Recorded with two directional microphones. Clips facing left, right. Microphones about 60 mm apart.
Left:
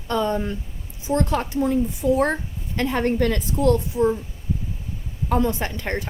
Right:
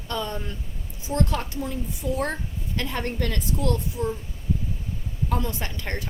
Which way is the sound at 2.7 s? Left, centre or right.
Left.